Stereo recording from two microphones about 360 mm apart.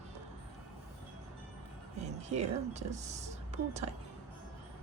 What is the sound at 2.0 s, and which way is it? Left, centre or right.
Speech, centre.